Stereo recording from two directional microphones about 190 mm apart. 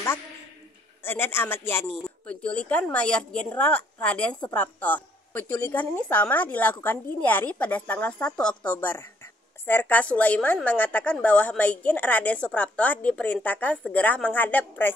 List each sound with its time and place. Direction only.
1.0 s speech: 10° left (ahead or behind)